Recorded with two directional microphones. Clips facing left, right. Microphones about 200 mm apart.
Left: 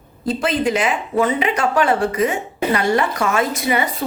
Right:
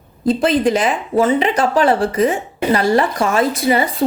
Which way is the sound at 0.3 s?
35° right (ahead or behind).